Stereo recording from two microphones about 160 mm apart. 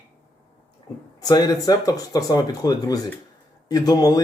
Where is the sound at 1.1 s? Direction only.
25° left (ahead or behind).